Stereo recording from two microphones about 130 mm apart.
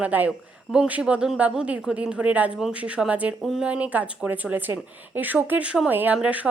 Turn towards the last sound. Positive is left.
turn(degrees=-10)  # may be behind; listen again after turning